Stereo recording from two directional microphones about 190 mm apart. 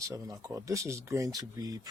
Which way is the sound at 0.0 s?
15° right (ahead or behind).